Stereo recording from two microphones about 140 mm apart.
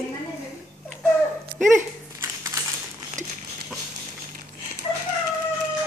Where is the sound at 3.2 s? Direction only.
60° right (ahead or behind).